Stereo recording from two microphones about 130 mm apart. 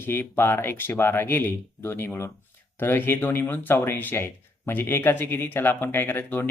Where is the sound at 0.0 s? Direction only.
15° left (ahead or behind).